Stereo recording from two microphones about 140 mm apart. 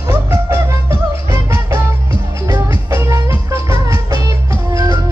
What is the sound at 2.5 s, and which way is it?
Music, 25° right (ahead or behind).